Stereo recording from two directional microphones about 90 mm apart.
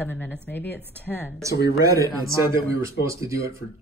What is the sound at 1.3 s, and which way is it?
Speech, 35° right (ahead or behind).